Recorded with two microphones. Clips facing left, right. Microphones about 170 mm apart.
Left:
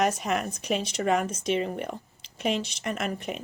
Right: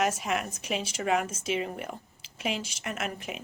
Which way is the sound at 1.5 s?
35° left (ahead or behind).